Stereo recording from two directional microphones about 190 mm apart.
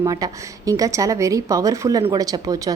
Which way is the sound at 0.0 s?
20° right (ahead or behind).